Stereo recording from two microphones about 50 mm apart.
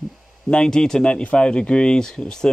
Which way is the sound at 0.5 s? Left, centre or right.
Centre.